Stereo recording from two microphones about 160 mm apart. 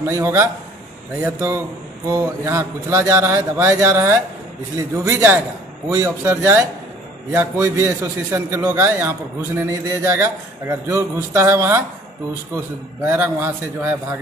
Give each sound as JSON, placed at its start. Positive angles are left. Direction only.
{"t": 0.0, "sound": "a man's voice", "side_deg": -20}
{"t": 9.7, "sound": "a sound", "side_deg": -20}
{"t": 12.5, "sound": "a man's voice", "side_deg": -10}